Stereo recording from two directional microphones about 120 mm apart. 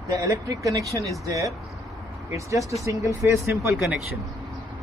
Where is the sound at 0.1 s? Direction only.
25° right (ahead or behind).